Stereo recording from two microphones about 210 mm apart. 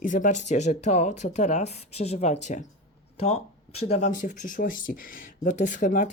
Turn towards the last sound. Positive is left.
turn(degrees=35)  # may be behind; listen again after turning